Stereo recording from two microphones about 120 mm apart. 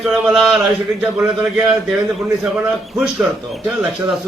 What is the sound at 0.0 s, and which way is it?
Speech, centre (ahead or behind).